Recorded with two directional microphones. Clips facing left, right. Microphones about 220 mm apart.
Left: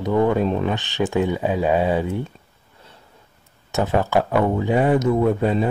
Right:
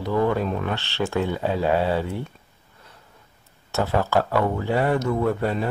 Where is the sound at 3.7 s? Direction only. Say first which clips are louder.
Left 2 dB; 15° left (ahead or behind).